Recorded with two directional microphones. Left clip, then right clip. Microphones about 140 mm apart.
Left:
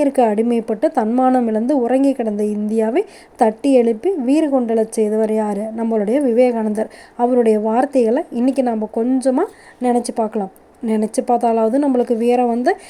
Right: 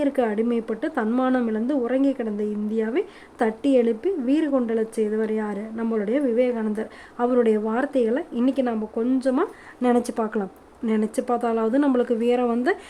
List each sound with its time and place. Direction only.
0.0 s speech: 25° left (ahead or behind)
7.2 s a woman's voice: 15° left (ahead or behind)